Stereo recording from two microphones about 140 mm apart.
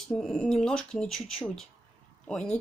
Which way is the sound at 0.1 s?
5° left (ahead or behind).